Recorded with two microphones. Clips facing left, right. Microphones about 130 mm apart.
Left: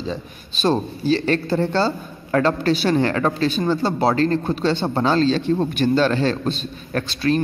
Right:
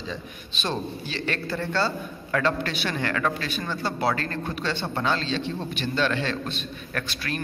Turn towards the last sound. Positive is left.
turn(degrees=30)  # may be behind; listen again after turning